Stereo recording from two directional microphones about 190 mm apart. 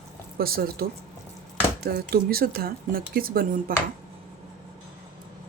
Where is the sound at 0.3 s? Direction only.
50° right (ahead or behind).